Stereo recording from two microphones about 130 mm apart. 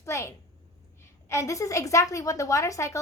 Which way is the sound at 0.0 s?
20° left (ahead or behind).